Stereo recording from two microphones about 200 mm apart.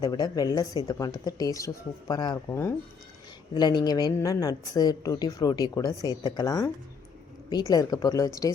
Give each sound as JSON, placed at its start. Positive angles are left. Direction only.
{"t": 0.0, "sound": "a woman's voice", "side_deg": 20}
{"t": 7.7, "sound": "speech", "side_deg": 20}